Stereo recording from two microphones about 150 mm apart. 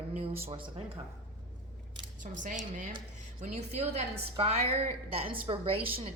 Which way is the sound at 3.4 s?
50° right (ahead or behind).